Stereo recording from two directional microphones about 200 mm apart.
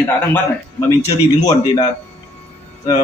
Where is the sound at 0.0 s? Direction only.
10° left (ahead or behind).